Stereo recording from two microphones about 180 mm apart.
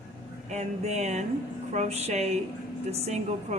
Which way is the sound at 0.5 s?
40° right (ahead or behind).